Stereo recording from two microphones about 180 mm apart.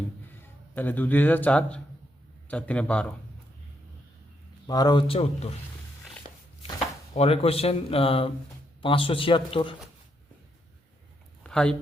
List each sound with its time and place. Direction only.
0.7 s speech: 10° left (ahead or behind)
4.6 s a man's voice: 20° left (ahead or behind)
7.1 s a man's voice: 35° left (ahead or behind)
11.4 s speech: 5° left (ahead or behind)